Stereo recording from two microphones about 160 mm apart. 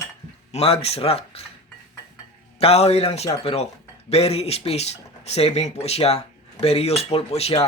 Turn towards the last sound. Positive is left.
turn(degrees=40)  # may be behind; listen again after turning